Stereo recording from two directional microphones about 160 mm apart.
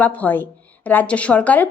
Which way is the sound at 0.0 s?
10° left (ahead or behind).